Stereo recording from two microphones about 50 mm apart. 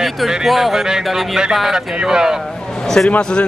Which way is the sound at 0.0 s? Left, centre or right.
Centre.